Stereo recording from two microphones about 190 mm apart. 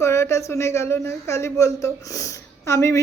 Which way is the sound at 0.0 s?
15° left (ahead or behind).